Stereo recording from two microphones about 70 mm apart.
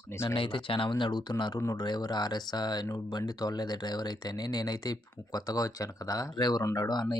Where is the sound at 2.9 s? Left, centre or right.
Left.